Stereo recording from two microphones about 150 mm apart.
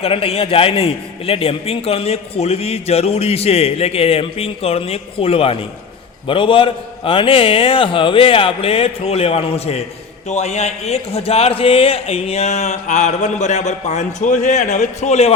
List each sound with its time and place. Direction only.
0.0 s a man's voice: 40° left (ahead or behind)